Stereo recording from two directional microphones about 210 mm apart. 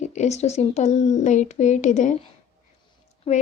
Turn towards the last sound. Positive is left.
turn(degrees=30)  # may be behind; listen again after turning